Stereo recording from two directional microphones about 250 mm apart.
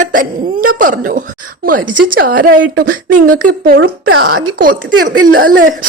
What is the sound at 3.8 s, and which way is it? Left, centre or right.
Speech, right.